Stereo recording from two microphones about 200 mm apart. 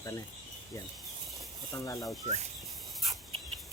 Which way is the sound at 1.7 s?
15° left (ahead or behind).